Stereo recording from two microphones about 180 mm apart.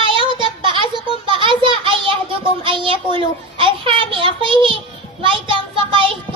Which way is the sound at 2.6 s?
30° right (ahead or behind).